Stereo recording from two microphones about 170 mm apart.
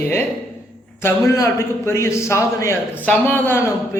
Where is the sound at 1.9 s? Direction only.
15° left (ahead or behind).